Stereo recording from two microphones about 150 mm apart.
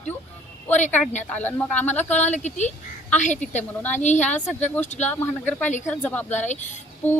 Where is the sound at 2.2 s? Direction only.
50° left (ahead or behind).